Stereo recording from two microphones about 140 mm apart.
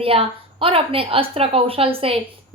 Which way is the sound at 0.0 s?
40° right (ahead or behind).